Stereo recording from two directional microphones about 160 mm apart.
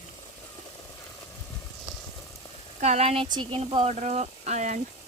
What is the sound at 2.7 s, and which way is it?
A woman's voice, 45° right (ahead or behind).